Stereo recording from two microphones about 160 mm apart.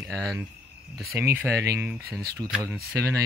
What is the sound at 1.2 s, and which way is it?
Speech, 15° right (ahead or behind).